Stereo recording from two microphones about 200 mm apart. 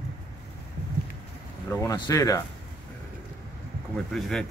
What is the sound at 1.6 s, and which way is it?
Speech, 15° left (ahead or behind).